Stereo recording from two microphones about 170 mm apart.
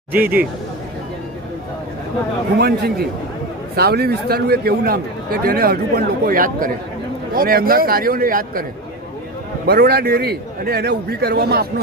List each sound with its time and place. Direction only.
0.1 s speech: 10° right (ahead or behind)
2.6 s a man's voice: 65° right (ahead or behind)
9.6 s a man's voice: 70° right (ahead or behind)